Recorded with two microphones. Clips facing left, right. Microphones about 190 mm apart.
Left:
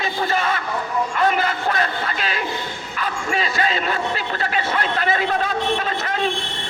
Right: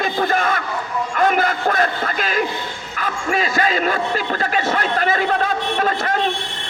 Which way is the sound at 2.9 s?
45° right (ahead or behind).